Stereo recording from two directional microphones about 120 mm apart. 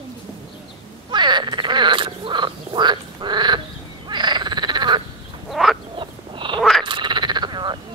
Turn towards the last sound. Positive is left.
turn(degrees=-40)  # may be behind; listen again after turning